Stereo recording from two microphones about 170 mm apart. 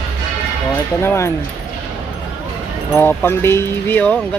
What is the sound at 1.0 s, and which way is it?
Speech, 15° left (ahead or behind).